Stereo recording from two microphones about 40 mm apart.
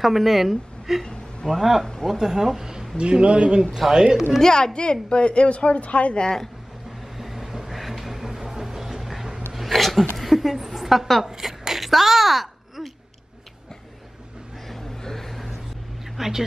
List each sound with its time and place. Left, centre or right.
0.0 s a woman's voice: centre
2.0 s speech: centre
3.0 s speech: right
3.7 s speech: centre
4.0 s speech: centre
4.4 s speech: centre; by 6.2 s left
6.2 s a woman's voice: centre
7.2 s music: centre
9.5 s speech: centre
10.1 s a sound: centre
11.2 s a sound: centre
14.7 s a sound: centre
16.2 s speech: centre